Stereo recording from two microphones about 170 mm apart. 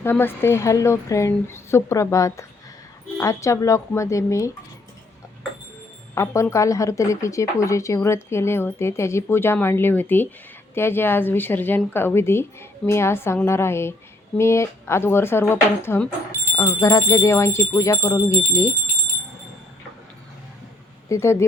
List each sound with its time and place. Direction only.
0.0 s a woman's voice: 10° left (ahead or behind)
6.1 s a woman's voice: 15° left (ahead or behind)
21.1 s a woman's voice: 15° left (ahead or behind)